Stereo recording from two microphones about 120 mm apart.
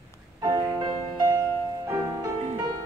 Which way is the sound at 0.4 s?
30° right (ahead or behind).